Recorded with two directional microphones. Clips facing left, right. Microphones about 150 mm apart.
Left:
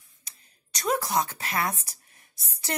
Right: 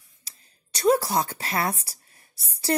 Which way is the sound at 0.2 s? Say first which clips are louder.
Right 1 dB; 30° right (ahead or behind).